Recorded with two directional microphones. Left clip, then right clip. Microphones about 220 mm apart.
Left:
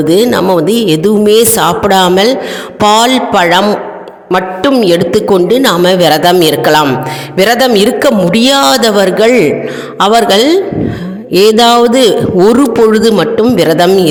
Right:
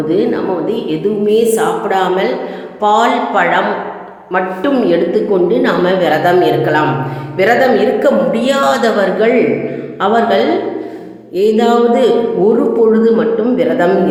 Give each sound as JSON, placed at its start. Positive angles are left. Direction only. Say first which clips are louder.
{"t": 0.1, "sound": "a woman's voice", "louder": "left 7 dB", "side_deg": 50}